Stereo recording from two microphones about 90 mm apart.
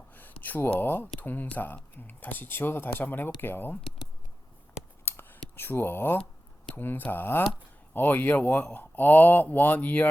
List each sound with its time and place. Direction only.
0.1 s speech: 20° left (ahead or behind)
5.0 s a sound: 25° left (ahead or behind)
6.7 s speech: 20° left (ahead or behind)